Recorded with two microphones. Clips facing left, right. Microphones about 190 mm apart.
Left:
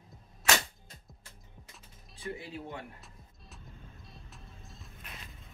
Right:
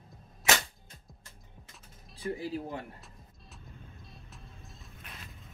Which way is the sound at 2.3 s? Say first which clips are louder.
Right 6 dB; 35° right (ahead or behind).